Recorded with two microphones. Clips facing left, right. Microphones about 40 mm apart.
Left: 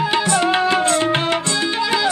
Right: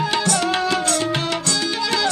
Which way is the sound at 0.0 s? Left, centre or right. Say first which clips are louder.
Left 3 dB; centre.